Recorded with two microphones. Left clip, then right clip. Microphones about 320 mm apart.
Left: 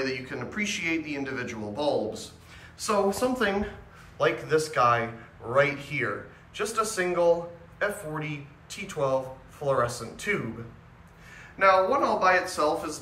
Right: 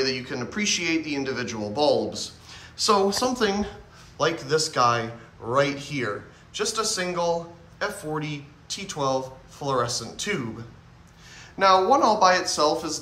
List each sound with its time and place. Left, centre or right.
0.0 s a man's voice: centre